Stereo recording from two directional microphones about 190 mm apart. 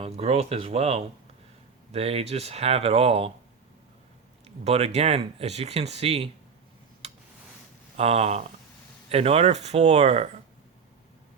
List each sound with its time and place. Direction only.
0.0 s speech: 35° right (ahead or behind)
4.4 s speech: 35° right (ahead or behind)
7.9 s speech: 30° right (ahead or behind)